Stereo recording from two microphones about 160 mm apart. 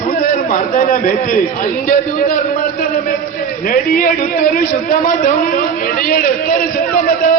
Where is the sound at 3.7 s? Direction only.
60° left (ahead or behind).